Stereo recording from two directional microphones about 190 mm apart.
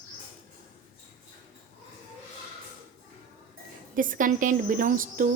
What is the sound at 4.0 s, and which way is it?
A woman's voice, 45° right (ahead or behind).